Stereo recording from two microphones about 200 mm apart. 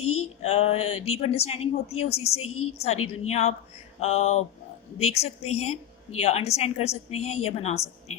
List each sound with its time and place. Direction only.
0.0 s a woman's voice: 30° left (ahead or behind)